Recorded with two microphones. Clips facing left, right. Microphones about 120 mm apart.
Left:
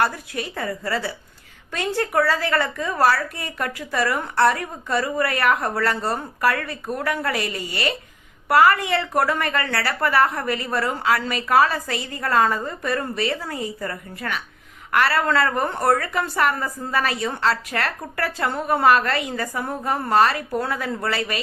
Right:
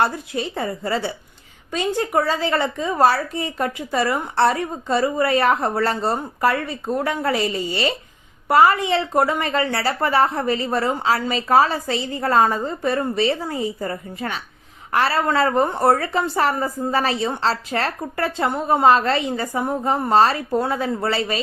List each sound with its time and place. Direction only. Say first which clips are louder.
0.0 s a woman's voice: right 2 dB; 25° right (ahead or behind)